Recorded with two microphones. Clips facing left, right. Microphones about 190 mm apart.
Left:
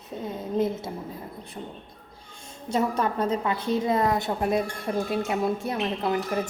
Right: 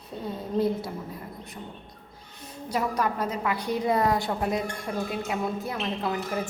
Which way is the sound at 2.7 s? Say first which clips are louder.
Left 2 dB; 30° left (ahead or behind).